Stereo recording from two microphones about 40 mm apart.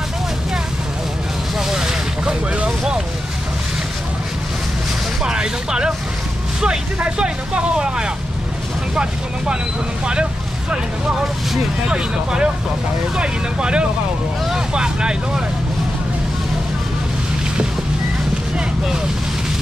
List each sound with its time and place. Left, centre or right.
1.7 s vehicle: centre
5.2 s a sound: centre
7.0 s speech: right
11.9 s speech: right